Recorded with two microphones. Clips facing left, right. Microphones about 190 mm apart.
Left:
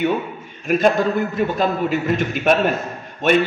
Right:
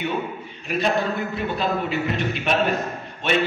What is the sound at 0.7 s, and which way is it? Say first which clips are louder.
A man's voice: left 6 dB; 45° left (ahead or behind).